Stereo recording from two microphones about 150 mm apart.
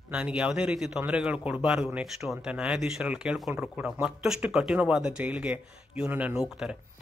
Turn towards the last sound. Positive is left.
turn(degrees=-5)  # may be behind; listen again after turning